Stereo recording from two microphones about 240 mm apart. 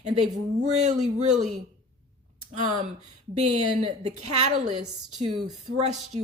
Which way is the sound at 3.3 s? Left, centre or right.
Right.